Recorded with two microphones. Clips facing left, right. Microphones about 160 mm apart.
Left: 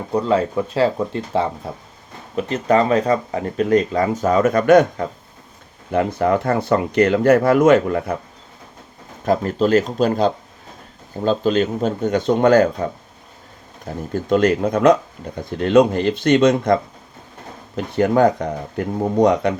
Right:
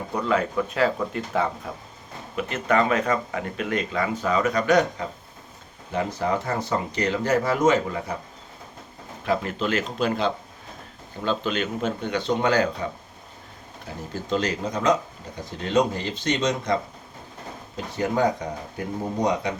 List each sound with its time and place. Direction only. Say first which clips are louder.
0.1 s speech: left 6 dB; 30° left (ahead or behind); by 8.1 s 55° left (ahead or behind)
9.2 s speech: left 7 dB; 40° left (ahead or behind); by 16.7 s 55° left (ahead or behind)
17.7 s speech: left 8 dB; 65° left (ahead or behind)